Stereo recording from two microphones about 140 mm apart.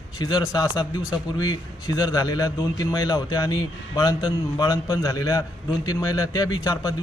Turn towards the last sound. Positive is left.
turn(degrees=25)  # may be behind; listen again after turning